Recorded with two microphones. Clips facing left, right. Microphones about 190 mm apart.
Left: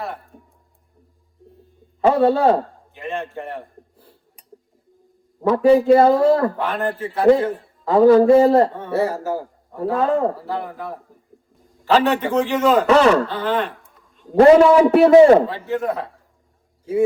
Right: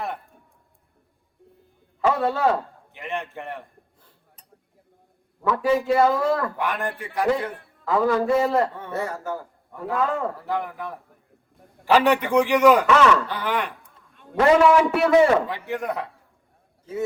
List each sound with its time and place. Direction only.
2.0 s a man's voice: 35° left (ahead or behind)
2.9 s a man's voice: 20° right (ahead or behind)
3.5 s gasp: 35° left (ahead or behind)
5.4 s a man's voice: 35° left (ahead or behind)
7.0 s speech: 15° right (ahead or behind)
7.3 s a man's voice: 30° left (ahead or behind)
7.5 s a sound: 60° right (ahead or behind)
7.9 s a man's voice: 35° left (ahead or behind)
11.6 s a sound: 60° right (ahead or behind)
11.9 s speech: 15° right (ahead or behind)
12.9 s a man's voice: 35° left (ahead or behind)
13.2 s speech: 15° right (ahead or behind)
14.3 s a man's voice: 30° left (ahead or behind)
15.4 s speech: 15° right (ahead or behind)